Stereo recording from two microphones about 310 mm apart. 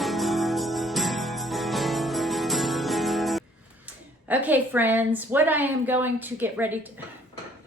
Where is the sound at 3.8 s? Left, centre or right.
Centre.